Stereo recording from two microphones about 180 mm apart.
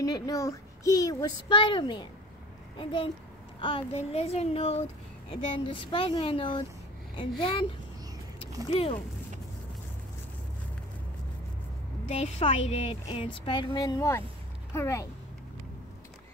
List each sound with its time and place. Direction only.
0.0 s a child's voice: 20° left (ahead or behind)
12.1 s a child's voice: 35° left (ahead or behind); by 15.0 s 15° left (ahead or behind)